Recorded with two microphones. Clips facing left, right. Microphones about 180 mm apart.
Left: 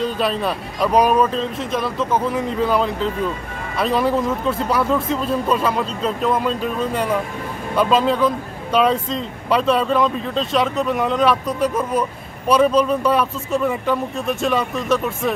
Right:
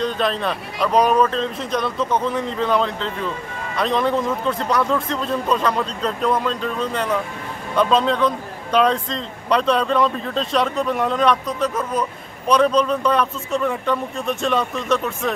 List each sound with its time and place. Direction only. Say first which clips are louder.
0.0 s speech: left 1 dB; 5° left (ahead or behind)